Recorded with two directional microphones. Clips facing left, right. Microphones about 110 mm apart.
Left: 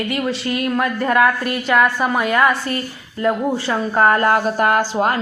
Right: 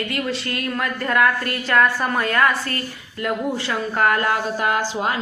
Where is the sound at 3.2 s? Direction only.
35° left (ahead or behind); by 5.1 s 50° left (ahead or behind).